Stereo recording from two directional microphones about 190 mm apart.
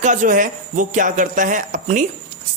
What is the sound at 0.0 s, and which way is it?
Speech, 40° right (ahead or behind).